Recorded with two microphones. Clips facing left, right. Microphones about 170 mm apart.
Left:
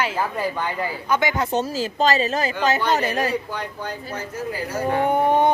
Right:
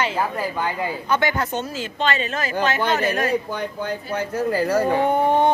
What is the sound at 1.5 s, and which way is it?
Speech, 35° left (ahead or behind).